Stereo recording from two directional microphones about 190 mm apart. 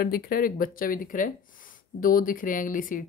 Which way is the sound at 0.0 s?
50° left (ahead or behind).